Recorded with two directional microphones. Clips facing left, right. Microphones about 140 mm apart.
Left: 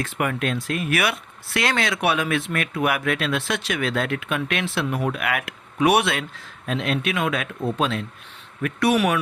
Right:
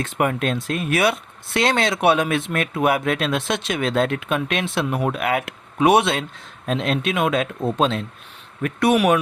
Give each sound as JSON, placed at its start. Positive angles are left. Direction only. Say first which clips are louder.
{"t": 0.0, "sound": "speech", "louder": "right 3 dB", "side_deg": -25}